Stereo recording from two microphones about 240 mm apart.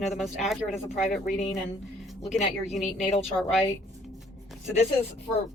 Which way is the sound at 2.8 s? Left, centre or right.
Centre.